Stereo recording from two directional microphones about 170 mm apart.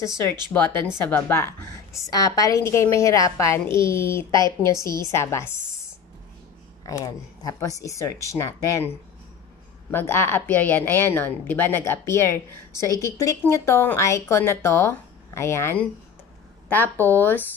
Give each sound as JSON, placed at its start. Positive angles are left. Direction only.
{"t": 0.5, "sound": "a woman's voice", "side_deg": 20}
{"t": 4.5, "sound": "a woman's voice", "side_deg": -25}
{"t": 5.1, "sound": "a woman's voice", "side_deg": 15}
{"t": 6.9, "sound": "a woman's voice", "side_deg": 20}